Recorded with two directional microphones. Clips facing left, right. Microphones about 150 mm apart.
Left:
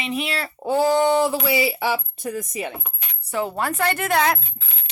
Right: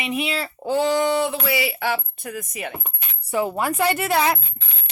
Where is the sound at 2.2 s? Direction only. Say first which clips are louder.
Left 3 dB; 25° left (ahead or behind).